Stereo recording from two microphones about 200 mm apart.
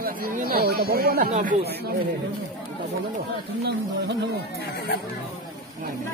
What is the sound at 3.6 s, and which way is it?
Speech, 55° right (ahead or behind).